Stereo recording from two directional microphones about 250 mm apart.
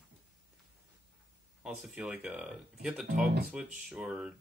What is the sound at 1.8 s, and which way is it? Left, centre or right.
Speech, centre.